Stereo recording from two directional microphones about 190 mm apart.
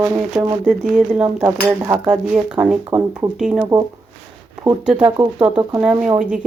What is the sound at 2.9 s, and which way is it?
Speech, 15° right (ahead or behind).